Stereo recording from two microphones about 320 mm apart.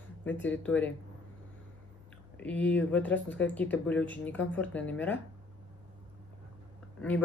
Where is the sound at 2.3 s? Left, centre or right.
Centre.